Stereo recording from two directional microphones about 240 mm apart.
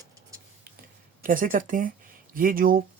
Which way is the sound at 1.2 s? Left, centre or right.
Right.